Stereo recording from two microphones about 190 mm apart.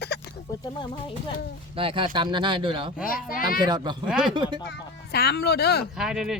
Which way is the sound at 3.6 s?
20° right (ahead or behind).